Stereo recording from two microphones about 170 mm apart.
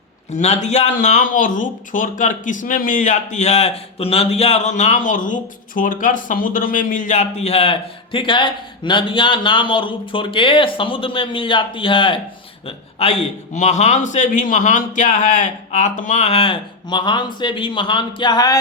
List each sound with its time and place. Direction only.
0.3 s a man's voice: 40° left (ahead or behind); by 18.6 s 20° left (ahead or behind)